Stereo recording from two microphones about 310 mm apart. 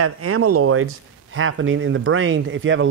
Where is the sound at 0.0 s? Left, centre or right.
Right.